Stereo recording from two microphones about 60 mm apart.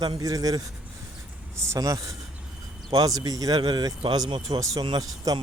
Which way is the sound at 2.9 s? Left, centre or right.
Right.